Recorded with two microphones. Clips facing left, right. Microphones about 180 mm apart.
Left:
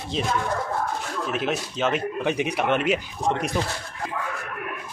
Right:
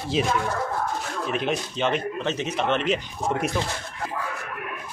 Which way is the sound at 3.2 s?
5° right (ahead or behind).